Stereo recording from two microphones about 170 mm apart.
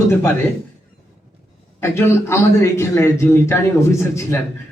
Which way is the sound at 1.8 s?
15° left (ahead or behind).